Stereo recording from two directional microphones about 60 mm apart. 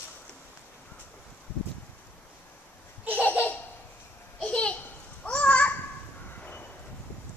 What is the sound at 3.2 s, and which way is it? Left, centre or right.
Laughter, left.